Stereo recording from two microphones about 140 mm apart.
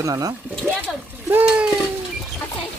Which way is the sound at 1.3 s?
10° right (ahead or behind).